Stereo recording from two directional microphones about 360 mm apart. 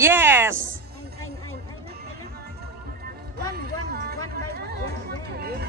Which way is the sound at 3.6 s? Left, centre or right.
Right.